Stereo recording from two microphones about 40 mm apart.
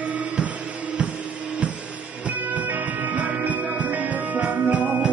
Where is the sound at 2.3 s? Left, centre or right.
Right.